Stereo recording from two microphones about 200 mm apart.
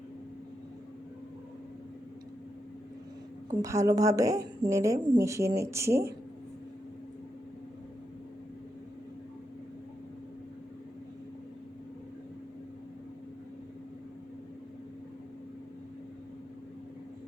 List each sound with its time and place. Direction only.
3.6 s a woman's voice: 15° right (ahead or behind)